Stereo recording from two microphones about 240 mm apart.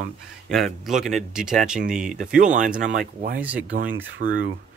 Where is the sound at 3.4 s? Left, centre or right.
Centre.